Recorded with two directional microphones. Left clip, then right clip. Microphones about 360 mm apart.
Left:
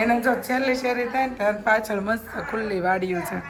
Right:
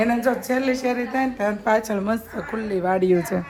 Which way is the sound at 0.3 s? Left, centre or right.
Centre.